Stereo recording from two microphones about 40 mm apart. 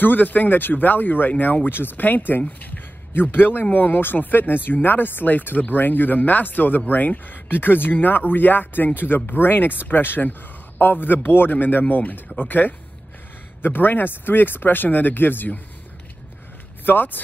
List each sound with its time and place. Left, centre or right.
0.0 s speech: left
1.7 s speech: left
2.4 s speech: left
3.2 s speech: left
16.8 s speech: left